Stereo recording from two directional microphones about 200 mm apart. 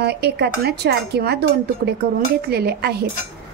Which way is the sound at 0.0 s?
55° right (ahead or behind).